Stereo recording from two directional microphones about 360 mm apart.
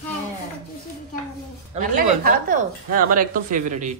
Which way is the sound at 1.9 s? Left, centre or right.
Right.